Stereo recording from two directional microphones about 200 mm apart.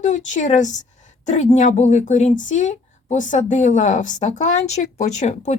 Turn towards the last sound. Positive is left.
turn(degrees=35)  # may be behind; listen again after turning